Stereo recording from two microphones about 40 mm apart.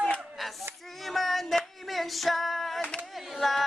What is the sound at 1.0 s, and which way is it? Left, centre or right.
Female singing, centre.